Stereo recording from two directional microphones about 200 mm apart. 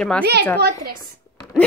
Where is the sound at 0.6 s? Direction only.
50° right (ahead or behind).